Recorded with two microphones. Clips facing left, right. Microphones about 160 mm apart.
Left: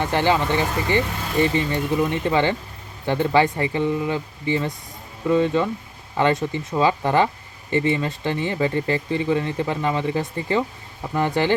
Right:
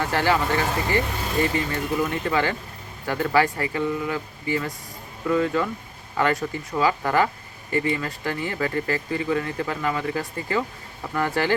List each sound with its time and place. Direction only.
0.0 s speech: 20° left (ahead or behind)